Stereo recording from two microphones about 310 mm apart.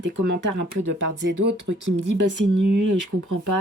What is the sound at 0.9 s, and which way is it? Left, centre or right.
Speech, right.